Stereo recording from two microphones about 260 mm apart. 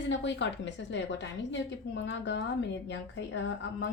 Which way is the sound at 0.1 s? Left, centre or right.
Left.